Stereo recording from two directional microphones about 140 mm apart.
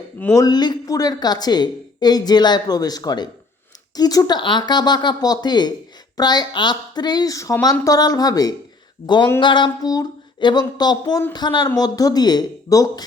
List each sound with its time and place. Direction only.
0.3 s a woman's voice: 30° left (ahead or behind)